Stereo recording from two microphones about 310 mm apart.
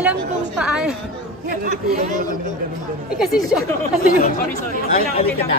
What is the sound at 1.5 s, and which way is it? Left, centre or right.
Speech, right.